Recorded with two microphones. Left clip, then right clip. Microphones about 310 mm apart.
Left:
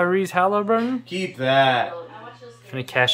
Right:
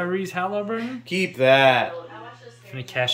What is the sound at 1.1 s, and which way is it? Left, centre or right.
Speech, right.